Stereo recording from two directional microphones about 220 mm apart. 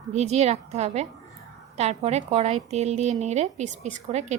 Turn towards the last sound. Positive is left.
turn(degrees=-30)  # may be behind; listen again after turning